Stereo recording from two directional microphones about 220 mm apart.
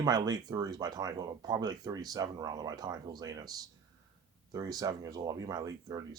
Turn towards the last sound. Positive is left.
turn(degrees=-15)  # may be behind; listen again after turning